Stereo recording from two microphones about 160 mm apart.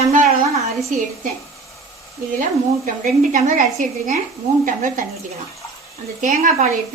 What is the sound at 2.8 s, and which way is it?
A woman's voice, 55° right (ahead or behind).